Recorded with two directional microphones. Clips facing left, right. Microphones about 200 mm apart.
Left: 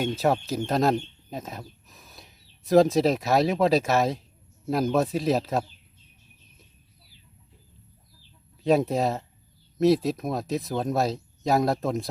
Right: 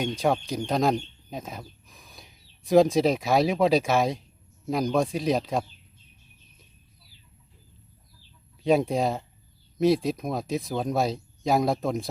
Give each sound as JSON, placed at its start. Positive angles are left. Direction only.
{"t": 0.0, "sound": "speech", "side_deg": 5}
{"t": 8.6, "sound": "speech", "side_deg": 0}